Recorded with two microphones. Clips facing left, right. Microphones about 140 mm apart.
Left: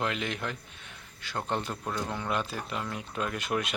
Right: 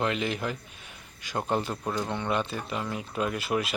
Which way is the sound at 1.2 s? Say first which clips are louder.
Right 4 dB; 15° right (ahead or behind).